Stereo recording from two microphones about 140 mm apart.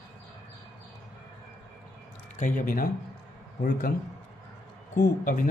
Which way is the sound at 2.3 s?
70° left (ahead or behind).